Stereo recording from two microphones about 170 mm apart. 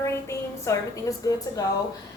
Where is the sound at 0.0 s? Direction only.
15° left (ahead or behind).